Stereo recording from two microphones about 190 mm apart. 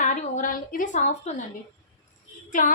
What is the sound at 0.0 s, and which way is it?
A woman's voice, 40° left (ahead or behind).